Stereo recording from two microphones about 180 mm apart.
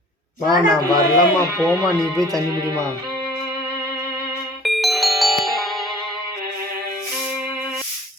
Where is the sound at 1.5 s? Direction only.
10° left (ahead or behind).